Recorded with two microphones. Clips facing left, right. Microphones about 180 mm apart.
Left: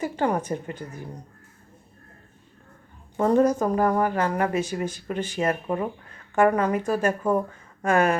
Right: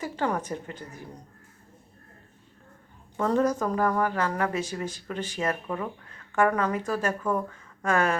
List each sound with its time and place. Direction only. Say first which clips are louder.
0.0 s a woman's voice: left 4 dB; 15° left (ahead or behind)
3.2 s a woman's voice: left 5 dB; 15° left (ahead or behind)
5.4 s speech: left 5 dB; 30° left (ahead or behind)
6.6 s a woman's voice: left 4 dB; 15° left (ahead or behind)
7.2 s speech: left 4 dB; 25° left (ahead or behind)
7.9 s a woman's voice: left 4 dB; 15° left (ahead or behind)